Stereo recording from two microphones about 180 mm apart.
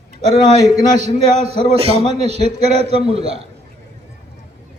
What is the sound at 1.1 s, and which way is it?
A man's voice, 35° right (ahead or behind).